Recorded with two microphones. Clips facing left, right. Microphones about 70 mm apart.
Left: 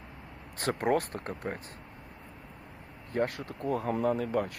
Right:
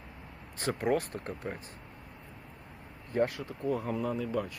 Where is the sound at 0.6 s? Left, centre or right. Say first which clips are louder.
Left 2 dB; left.